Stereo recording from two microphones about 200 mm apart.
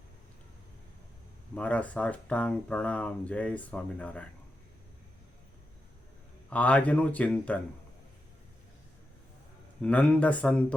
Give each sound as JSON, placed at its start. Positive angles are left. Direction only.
{"t": 1.5, "sound": "speech", "side_deg": 5}
{"t": 6.5, "sound": "speech", "side_deg": 5}
{"t": 9.8, "sound": "speech", "side_deg": 5}